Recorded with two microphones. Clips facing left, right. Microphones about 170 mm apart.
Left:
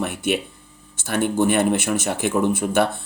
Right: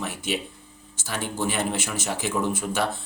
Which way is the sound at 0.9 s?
60° left (ahead or behind).